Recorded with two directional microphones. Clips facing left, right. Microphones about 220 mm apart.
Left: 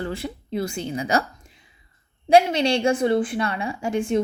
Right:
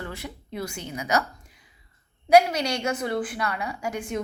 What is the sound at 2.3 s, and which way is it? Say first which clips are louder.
A woman's voice: left 2 dB; 25° left (ahead or behind).